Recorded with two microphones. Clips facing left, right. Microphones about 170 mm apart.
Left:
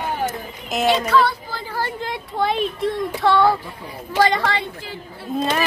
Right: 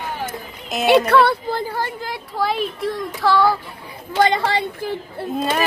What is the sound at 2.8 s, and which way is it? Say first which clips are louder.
Child singing: left 1 dB; 25° left (ahead or behind).